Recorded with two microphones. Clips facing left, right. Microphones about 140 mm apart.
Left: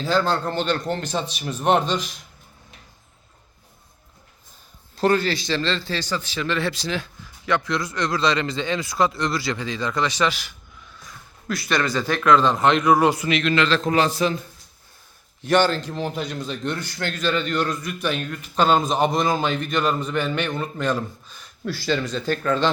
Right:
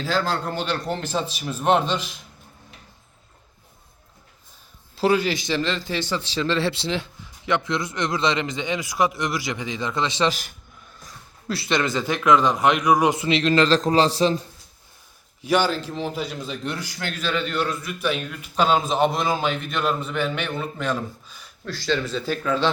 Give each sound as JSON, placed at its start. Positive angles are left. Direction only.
{"t": 0.0, "sound": "a man's voice", "side_deg": -5}
{"t": 4.9, "sound": "a man's voice", "side_deg": -10}
{"t": 10.2, "sound": "a man's voice", "side_deg": -45}
{"t": 11.0, "sound": "a man's voice", "side_deg": -30}
{"t": 15.4, "sound": "a man's voice", "side_deg": -10}
{"t": 21.6, "sound": "a man's voice", "side_deg": 5}